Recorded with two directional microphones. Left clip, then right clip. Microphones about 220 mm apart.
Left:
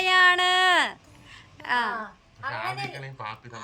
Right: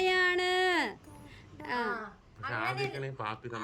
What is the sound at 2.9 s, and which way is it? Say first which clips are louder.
Speech: left 1 dB; 15° right (ahead or behind).